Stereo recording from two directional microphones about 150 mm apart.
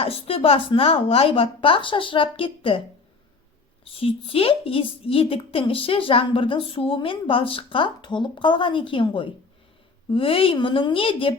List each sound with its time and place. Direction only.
0.0 s a woman's voice: 40° left (ahead or behind)
3.8 s a woman's voice: 40° left (ahead or behind)